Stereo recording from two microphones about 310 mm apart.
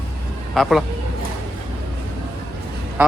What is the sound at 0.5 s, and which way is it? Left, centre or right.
Speech, centre.